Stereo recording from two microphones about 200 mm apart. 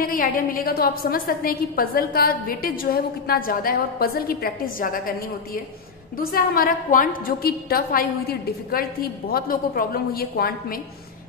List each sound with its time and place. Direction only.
0.0 s a woman's voice: 45° left (ahead or behind)